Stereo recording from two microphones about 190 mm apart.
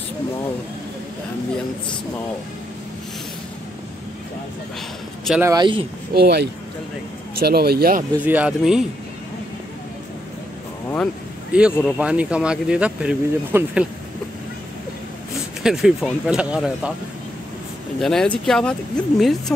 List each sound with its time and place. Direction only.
5.4 s speech: 20° right (ahead or behind)
6.1 s speech: 55° right (ahead or behind)
8.3 s speech: 5° right (ahead or behind)
11.5 s speech: 5° right (ahead or behind)
15.6 s speech: centre (ahead or behind)
17.9 s speech: 5° left (ahead or behind)